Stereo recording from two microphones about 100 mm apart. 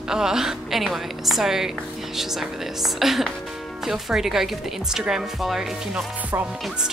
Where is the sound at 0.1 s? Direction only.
5° right (ahead or behind).